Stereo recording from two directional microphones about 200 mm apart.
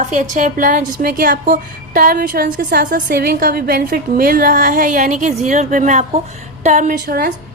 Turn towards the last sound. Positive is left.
turn(degrees=-50)  # may be behind; listen again after turning